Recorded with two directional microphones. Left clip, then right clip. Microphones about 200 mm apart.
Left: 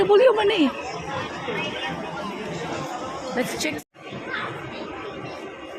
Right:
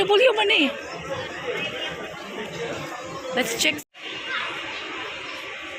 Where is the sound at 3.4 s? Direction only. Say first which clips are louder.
Right 4 dB; 5° left (ahead or behind).